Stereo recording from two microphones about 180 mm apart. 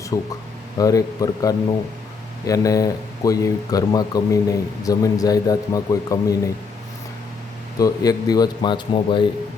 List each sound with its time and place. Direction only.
0.1 s speech: 20° left (ahead or behind)
7.8 s speech: 20° left (ahead or behind)